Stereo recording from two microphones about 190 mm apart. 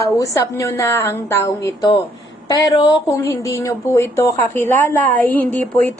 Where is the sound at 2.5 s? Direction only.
20° left (ahead or behind).